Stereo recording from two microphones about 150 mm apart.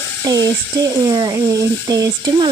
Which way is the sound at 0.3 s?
25° right (ahead or behind).